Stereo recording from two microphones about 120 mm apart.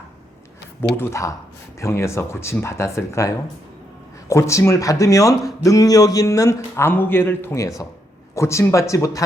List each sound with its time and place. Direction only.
0.8 s speech: 20° left (ahead or behind)